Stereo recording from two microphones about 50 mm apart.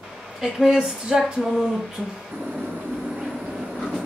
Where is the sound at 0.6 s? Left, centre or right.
Centre.